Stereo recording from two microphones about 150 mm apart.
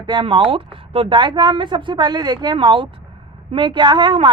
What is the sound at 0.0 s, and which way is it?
A woman's voice, 30° right (ahead or behind).